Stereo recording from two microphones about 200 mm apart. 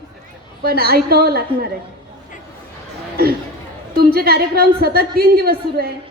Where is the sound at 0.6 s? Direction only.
50° right (ahead or behind).